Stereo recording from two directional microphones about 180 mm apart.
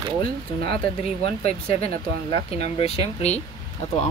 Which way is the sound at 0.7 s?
30° left (ahead or behind).